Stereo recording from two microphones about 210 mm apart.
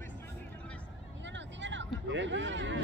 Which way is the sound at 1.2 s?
60° right (ahead or behind).